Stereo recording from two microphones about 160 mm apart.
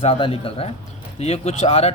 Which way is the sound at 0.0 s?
35° left (ahead or behind).